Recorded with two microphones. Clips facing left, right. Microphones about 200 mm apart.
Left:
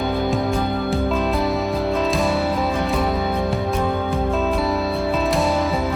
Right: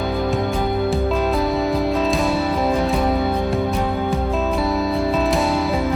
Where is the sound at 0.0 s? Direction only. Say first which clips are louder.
Even; centre (ahead or behind).